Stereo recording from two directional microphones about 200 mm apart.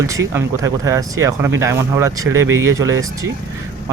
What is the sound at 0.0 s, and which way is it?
Speech, 15° right (ahead or behind).